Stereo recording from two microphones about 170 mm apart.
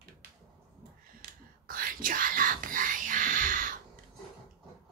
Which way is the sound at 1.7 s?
55° right (ahead or behind).